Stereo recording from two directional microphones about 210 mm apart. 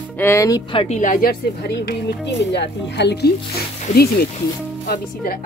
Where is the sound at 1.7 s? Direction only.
50° left (ahead or behind).